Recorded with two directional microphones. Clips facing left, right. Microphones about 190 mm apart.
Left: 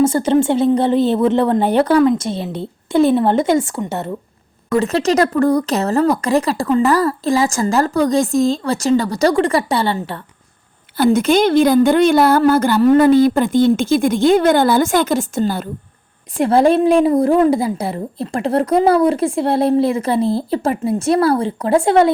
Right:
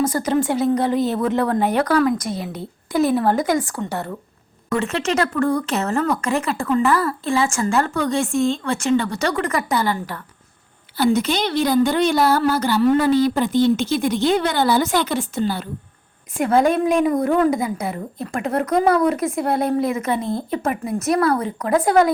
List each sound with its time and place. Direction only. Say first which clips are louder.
0.0 s speech: left 6 dB; 25° left (ahead or behind)
4.7 s a woman's voice: left 6 dB; 35° left (ahead or behind)
10.9 s a woman's voice: left 5 dB; 50° left (ahead or behind)
16.4 s a woman's voice: left 4 dB; 30° left (ahead or behind)